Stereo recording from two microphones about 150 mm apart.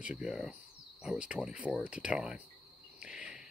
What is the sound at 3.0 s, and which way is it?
Cricket, 5° right (ahead or behind).